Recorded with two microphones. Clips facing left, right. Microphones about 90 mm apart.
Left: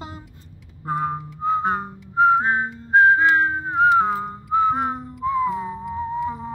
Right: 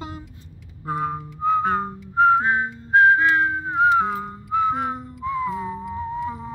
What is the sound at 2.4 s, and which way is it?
Whistling, 30° left (ahead or behind).